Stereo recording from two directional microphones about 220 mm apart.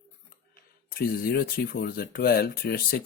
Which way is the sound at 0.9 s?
45° left (ahead or behind).